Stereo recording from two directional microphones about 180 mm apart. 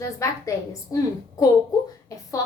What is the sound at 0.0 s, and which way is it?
A woman's voice, 15° left (ahead or behind).